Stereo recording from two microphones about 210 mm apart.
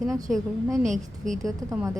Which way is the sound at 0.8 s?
35° right (ahead or behind).